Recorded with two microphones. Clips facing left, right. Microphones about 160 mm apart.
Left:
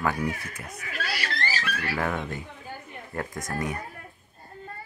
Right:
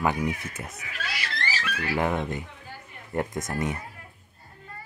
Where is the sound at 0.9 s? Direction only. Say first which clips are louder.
Left 3 dB; 40° left (ahead or behind).